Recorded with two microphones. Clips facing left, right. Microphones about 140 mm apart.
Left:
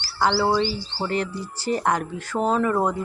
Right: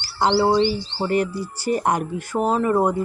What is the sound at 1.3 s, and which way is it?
Speech, 10° right (ahead or behind).